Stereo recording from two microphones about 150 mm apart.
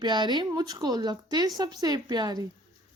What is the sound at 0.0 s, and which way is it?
Speech, 30° right (ahead or behind).